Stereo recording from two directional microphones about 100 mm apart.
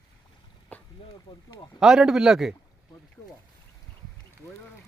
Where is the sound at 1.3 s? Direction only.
65° left (ahead or behind).